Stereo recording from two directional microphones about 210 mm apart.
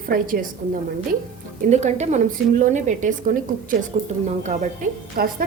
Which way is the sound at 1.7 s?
35° right (ahead or behind).